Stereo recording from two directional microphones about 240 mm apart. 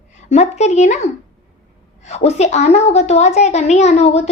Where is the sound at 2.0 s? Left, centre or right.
Left.